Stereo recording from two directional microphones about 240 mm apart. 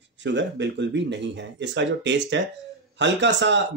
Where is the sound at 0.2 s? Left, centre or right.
Right.